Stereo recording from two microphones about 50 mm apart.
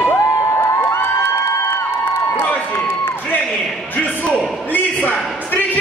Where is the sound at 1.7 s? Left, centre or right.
Left.